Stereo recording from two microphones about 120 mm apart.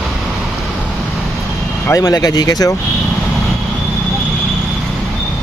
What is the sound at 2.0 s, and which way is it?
Speech, 30° left (ahead or behind).